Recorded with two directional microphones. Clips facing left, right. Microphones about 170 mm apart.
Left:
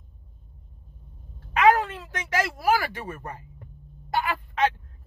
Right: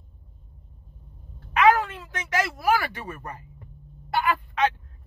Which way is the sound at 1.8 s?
30° left (ahead or behind).